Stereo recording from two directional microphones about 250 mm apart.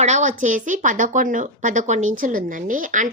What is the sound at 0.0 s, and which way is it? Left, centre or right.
A woman's voice, right.